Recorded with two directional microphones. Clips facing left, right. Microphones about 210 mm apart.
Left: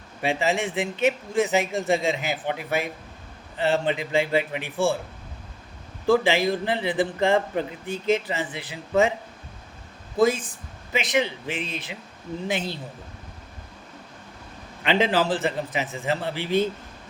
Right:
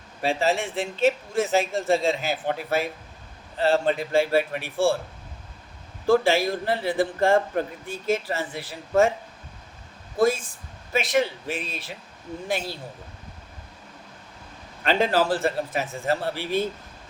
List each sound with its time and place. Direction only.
0.3 s a man's voice: 15° left (ahead or behind)
6.2 s a man's voice: 15° left (ahead or behind)
10.2 s a man's voice: 20° left (ahead or behind)
14.8 s a man's voice: 20° left (ahead or behind)